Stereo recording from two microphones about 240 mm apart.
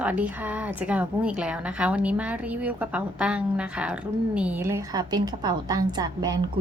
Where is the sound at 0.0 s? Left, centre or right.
Centre.